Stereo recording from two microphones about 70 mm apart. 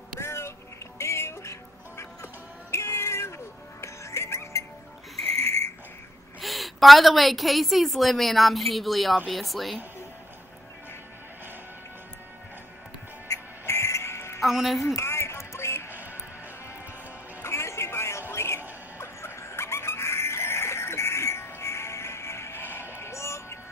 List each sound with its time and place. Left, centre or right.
0.2 s music: left
5.4 s a sound: left
6.4 s a woman's voice: centre
13.3 s music: left
14.4 s a woman's voice: centre
15.0 s music: left
17.4 s music: left